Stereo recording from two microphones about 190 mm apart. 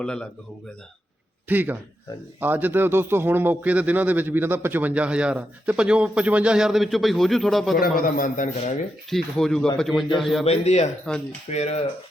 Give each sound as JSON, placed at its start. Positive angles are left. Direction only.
{"t": 0.0, "sound": "speech", "side_deg": 5}
{"t": 1.5, "sound": "a man's voice", "side_deg": -10}
{"t": 7.8, "sound": "a man's voice", "side_deg": 50}
{"t": 9.0, "sound": "speech", "side_deg": 0}
{"t": 10.4, "sound": "speech", "side_deg": 35}
{"t": 11.1, "sound": "speech", "side_deg": 5}
{"t": 11.5, "sound": "speech", "side_deg": 35}